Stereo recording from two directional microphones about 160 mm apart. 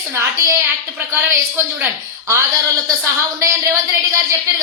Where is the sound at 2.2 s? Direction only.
20° right (ahead or behind).